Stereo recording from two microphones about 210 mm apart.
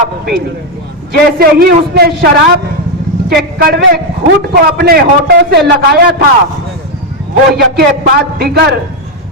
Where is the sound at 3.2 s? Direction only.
45° right (ahead or behind).